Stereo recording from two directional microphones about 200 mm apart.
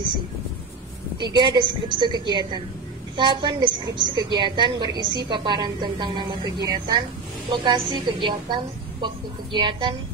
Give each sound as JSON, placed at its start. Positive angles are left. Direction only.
{"t": 1.2, "sound": "a woman's voice", "side_deg": -20}